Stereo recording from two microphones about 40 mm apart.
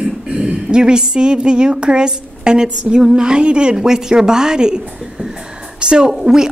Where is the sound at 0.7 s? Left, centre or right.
Centre.